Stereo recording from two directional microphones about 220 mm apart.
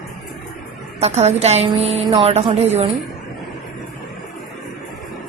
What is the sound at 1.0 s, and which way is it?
A woman's voice, 30° right (ahead or behind).